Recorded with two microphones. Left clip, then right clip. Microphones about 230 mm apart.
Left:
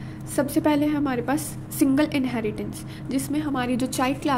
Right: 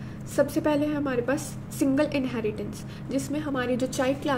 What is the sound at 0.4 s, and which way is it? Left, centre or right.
A woman's voice, left.